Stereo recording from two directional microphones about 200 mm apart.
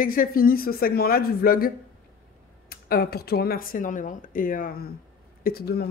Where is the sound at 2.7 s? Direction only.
50° left (ahead or behind).